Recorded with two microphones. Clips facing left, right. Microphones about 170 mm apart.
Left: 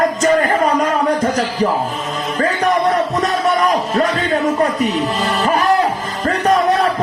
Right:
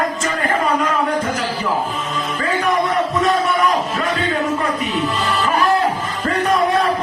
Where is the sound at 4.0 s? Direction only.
35° left (ahead or behind).